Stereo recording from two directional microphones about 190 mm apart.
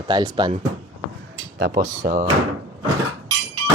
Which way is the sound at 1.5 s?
55° right (ahead or behind).